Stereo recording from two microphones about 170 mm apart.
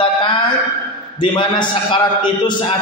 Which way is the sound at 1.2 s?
30° left (ahead or behind).